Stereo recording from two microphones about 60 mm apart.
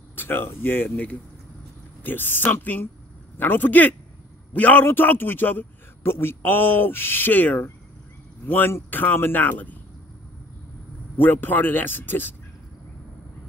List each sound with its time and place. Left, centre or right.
0.1 s speech: left
2.0 s a man's voice: left
11.1 s a man's voice: left